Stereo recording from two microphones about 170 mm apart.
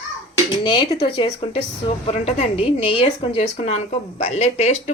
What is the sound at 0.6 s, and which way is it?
A woman's voice, 25° left (ahead or behind).